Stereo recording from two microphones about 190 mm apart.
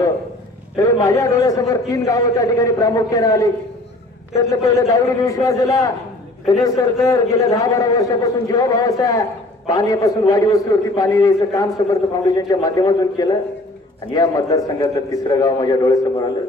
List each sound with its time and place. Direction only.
0.7 s a man's voice: 15° left (ahead or behind)